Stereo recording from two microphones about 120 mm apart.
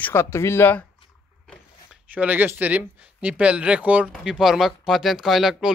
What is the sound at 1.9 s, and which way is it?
Speech, 15° right (ahead or behind).